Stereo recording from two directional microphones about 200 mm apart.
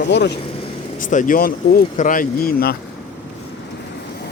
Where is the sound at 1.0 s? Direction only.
40° left (ahead or behind).